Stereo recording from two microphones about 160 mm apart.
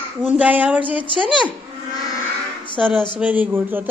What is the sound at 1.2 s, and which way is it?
Speech, 30° left (ahead or behind).